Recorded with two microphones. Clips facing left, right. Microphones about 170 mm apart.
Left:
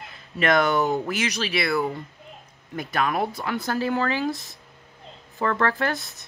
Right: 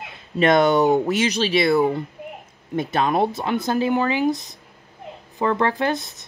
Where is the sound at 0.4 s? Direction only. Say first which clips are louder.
Right 5 dB; 25° right (ahead or behind).